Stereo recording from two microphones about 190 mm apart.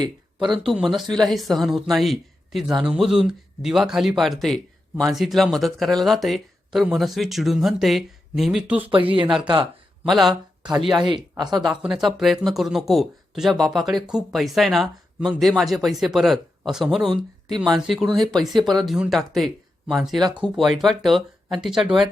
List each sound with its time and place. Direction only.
0.0 s a sound: 25° right (ahead or behind)
0.5 s speech: centre (ahead or behind)
11.0 s speech: 25° right (ahead or behind)
11.6 s speech: 5° right (ahead or behind)